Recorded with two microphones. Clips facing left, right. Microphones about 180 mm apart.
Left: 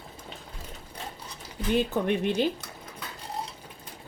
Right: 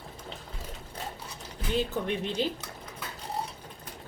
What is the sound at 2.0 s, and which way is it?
Speech, 60° left (ahead or behind).